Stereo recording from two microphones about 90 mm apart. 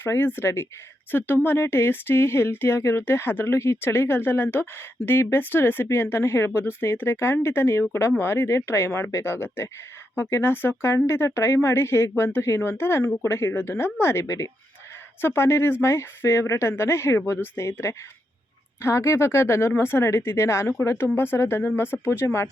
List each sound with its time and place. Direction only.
0.0 s speech: 25° left (ahead or behind)